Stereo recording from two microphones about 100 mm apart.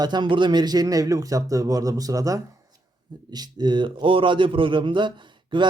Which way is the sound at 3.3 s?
45° right (ahead or behind).